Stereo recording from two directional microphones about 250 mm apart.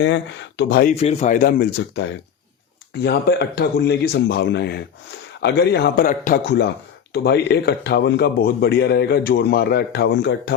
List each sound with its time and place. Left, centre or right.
0.0 s speech: left
0.9 s speech: left